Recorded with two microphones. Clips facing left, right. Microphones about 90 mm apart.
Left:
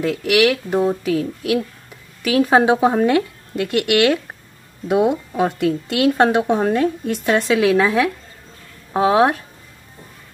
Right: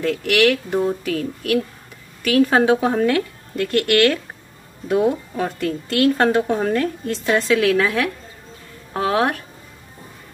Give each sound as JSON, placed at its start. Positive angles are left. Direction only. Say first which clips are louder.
{"t": 0.0, "sound": "a woman's voice", "louder": "left 1 dB", "side_deg": 10}